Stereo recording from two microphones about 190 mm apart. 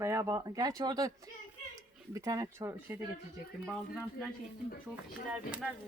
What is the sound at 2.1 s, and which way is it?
Speech, 15° right (ahead or behind).